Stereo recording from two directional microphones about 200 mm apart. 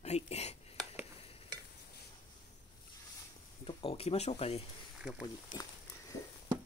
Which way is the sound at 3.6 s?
30° left (ahead or behind).